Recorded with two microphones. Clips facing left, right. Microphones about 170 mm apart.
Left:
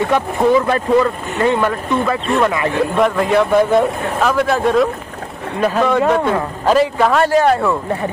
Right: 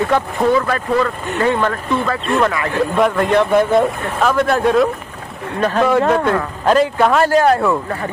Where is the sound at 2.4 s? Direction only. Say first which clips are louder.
Left 2 dB; 20° left (ahead or behind).